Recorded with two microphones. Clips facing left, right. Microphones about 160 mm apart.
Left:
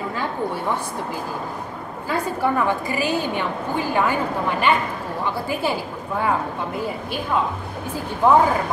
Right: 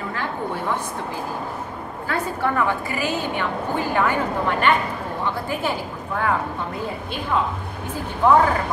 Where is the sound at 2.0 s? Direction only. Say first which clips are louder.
Left 2 dB; 10° left (ahead or behind).